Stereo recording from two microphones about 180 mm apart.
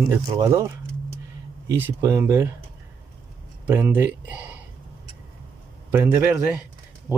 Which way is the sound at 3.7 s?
10° right (ahead or behind).